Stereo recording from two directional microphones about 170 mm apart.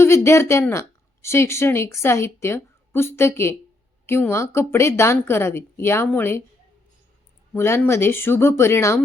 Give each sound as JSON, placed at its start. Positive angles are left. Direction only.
{"t": 0.0, "sound": "speech", "side_deg": 15}
{"t": 7.5, "sound": "speech", "side_deg": 15}